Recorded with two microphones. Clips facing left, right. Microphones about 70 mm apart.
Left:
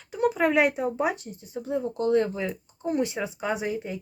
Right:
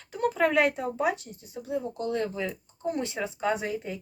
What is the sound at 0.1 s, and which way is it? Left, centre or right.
Speech, centre.